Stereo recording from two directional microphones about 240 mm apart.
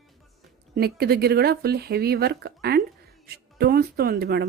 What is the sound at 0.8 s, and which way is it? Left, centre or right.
A woman's voice, right.